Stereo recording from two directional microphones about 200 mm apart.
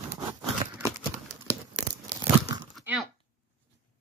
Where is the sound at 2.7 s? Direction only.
5° right (ahead or behind).